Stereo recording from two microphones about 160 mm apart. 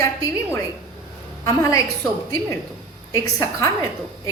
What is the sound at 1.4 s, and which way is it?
Speech, 20° left (ahead or behind).